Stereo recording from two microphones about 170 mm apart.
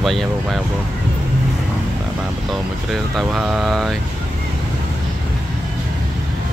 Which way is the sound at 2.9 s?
Centre (ahead or behind).